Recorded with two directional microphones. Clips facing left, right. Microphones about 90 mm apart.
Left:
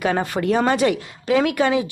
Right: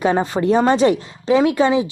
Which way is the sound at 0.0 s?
25° right (ahead or behind).